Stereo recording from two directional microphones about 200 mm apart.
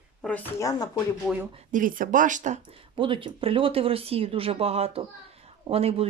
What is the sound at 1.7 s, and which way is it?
Speech, 45° right (ahead or behind).